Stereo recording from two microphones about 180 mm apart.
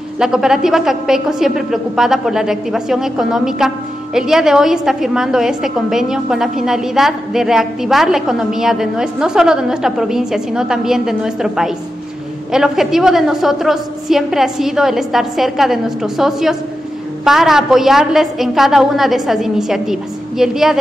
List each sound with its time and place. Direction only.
0.2 s a woman's voice: 5° right (ahead or behind)